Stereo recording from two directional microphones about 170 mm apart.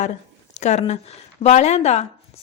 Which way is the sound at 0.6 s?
40° left (ahead or behind).